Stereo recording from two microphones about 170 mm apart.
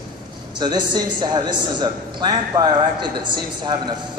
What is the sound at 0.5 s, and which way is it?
A woman's voice, 25° right (ahead or behind).